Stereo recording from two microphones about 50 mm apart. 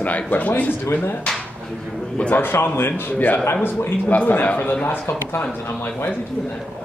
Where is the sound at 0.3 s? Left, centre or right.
Left.